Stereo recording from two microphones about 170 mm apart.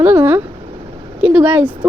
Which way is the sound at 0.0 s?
15° right (ahead or behind).